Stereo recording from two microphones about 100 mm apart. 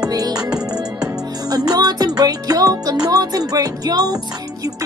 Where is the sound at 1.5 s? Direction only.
40° right (ahead or behind).